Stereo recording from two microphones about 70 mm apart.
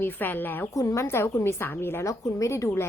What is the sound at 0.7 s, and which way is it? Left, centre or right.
Speech, left.